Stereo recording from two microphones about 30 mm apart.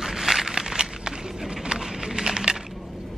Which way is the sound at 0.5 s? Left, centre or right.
Right.